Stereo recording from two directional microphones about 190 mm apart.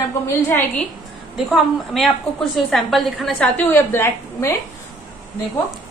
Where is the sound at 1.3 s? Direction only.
Centre (ahead or behind).